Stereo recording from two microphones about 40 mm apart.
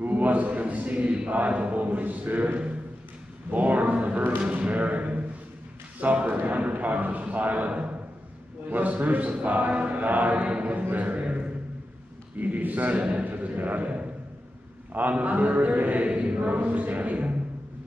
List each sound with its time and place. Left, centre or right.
0.0 s speech: right
8.7 s speech: right
10.4 s a man's voice: right
10.7 s a man's voice: right
12.4 s a man's voice: right
15.0 s speech: right
16.5 s speech: right